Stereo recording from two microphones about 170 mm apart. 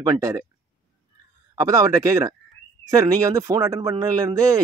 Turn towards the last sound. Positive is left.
turn(degrees=-20)  # may be behind; listen again after turning